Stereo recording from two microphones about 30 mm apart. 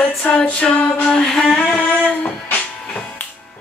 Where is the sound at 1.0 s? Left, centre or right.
Centre.